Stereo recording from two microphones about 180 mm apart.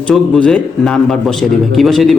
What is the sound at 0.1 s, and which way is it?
A man's voice, 5° left (ahead or behind).